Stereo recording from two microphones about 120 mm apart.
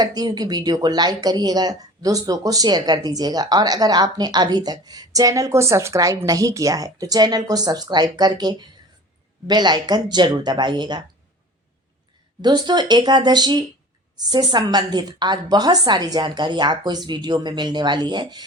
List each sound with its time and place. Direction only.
0.0 s speech: 35° right (ahead or behind)
12.4 s speech: 35° right (ahead or behind)